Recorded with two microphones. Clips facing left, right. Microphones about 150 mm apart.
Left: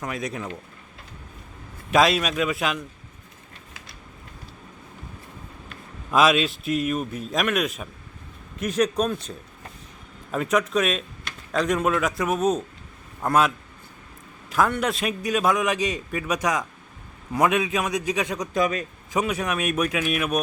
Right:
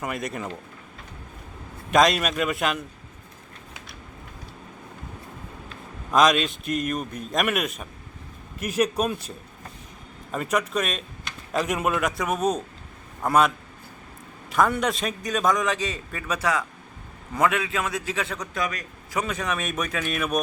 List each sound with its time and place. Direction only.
0.0 s a man's voice: centre (ahead or behind)
1.9 s a man's voice: centre (ahead or behind)
6.1 s a man's voice: 5° left (ahead or behind)
10.3 s a man's voice: centre (ahead or behind)
14.5 s a man's voice: centre (ahead or behind)
18.7 s a man's voice: 25° left (ahead or behind)
19.2 s a man's voice: 10° left (ahead or behind)